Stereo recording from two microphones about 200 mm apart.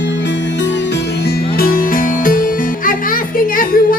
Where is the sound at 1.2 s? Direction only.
50° left (ahead or behind).